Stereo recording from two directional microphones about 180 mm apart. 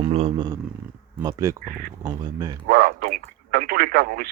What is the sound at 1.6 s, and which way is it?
Speech, 55° right (ahead or behind).